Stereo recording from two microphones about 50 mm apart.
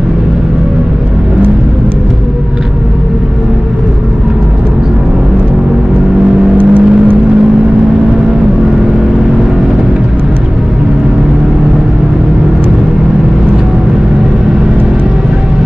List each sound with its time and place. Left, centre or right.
6.6 s vehicle: right